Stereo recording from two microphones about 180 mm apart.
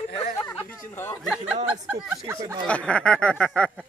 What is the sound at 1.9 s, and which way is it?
Speech, 15° right (ahead or behind).